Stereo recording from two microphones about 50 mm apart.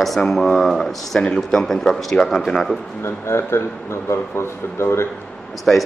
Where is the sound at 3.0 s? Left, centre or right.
Left.